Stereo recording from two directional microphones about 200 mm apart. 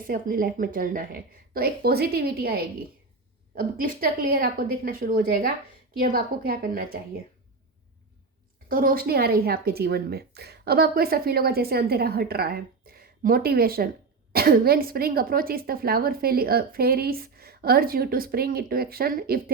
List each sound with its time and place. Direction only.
0.0 s a woman's voice: 45° right (ahead or behind)
8.7 s a woman's voice: 45° right (ahead or behind)